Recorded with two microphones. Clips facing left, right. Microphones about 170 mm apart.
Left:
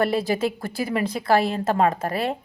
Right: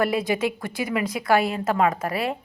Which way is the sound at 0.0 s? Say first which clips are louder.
Left 1 dB; 30° left (ahead or behind).